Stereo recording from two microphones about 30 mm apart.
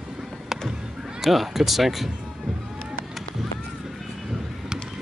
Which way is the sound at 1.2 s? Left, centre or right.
Centre.